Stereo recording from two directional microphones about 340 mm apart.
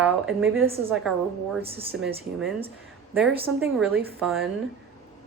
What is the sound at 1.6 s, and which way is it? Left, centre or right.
Speech, centre.